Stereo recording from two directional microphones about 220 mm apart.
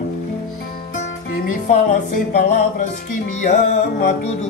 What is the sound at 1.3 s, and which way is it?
Music, 40° left (ahead or behind).